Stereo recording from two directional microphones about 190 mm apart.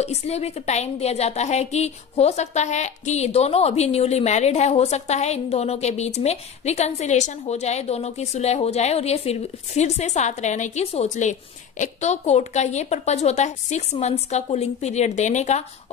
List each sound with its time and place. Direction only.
0.0 s a woman's voice: 35° left (ahead or behind)